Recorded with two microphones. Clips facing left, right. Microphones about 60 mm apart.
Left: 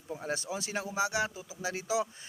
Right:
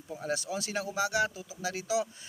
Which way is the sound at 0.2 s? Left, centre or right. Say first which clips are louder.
Right 3 dB; left.